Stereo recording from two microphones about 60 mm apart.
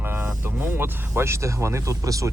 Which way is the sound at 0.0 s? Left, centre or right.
Right.